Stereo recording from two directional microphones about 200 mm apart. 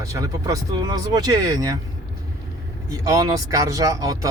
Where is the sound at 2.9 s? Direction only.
15° right (ahead or behind).